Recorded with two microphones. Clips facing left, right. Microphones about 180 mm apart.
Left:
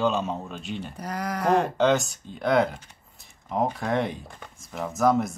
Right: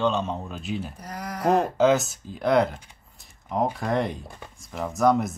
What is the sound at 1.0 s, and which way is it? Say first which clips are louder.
Speech: left 4 dB; 65° left (ahead or behind).